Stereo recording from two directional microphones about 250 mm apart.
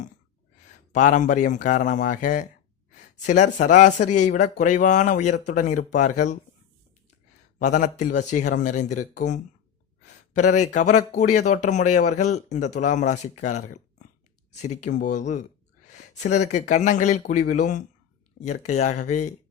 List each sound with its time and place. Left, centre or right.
0.9 s a man's voice: left
7.6 s speech: left